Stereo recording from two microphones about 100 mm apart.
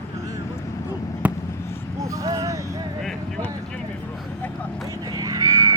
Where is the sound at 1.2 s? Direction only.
15° right (ahead or behind).